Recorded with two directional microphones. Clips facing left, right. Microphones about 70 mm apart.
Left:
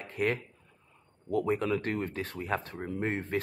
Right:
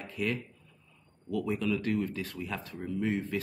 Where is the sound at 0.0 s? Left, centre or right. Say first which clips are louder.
Left 3 dB; left.